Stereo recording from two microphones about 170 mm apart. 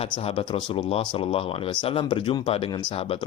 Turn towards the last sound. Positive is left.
turn(degrees=30)  # may be behind; listen again after turning